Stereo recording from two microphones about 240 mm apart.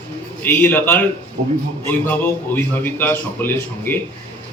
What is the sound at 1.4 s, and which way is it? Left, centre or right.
Speech, right.